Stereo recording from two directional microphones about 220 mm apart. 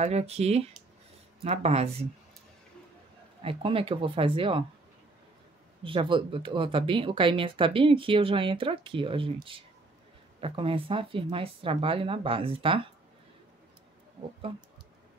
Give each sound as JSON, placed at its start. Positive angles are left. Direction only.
{"t": 0.0, "sound": "speech", "side_deg": -30}
{"t": 3.4, "sound": "speech", "side_deg": -25}
{"t": 5.9, "sound": "speech", "side_deg": -20}